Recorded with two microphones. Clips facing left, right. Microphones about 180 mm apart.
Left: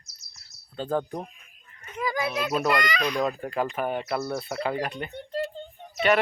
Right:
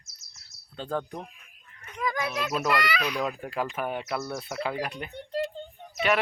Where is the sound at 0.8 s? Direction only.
5° left (ahead or behind).